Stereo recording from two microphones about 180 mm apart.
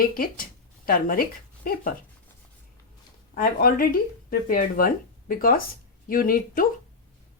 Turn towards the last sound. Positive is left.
turn(degrees=50)  # may be behind; listen again after turning